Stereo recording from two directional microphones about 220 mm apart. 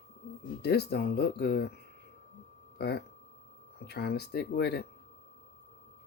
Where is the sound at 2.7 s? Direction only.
45° left (ahead or behind).